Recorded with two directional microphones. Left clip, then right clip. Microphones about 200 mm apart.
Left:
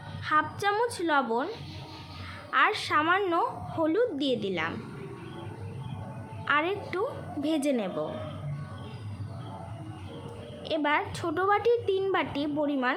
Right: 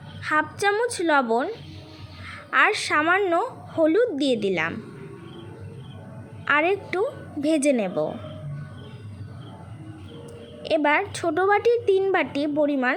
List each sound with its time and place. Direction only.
0.3 s speech: 25° right (ahead or behind)
2.5 s speech: 25° right (ahead or behind)
6.4 s a woman's voice: 25° right (ahead or behind)
10.6 s speech: 25° right (ahead or behind)